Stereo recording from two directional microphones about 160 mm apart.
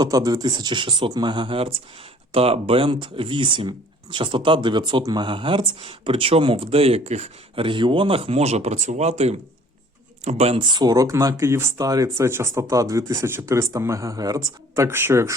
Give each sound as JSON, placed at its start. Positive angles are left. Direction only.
{"t": 0.0, "sound": "speech", "side_deg": -25}
{"t": 10.8, "sound": "speech", "side_deg": -25}